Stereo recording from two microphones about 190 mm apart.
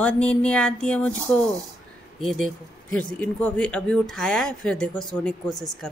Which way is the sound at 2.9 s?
5° left (ahead or behind).